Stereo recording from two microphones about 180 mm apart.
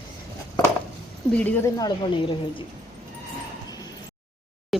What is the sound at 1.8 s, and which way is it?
Speech, 30° left (ahead or behind).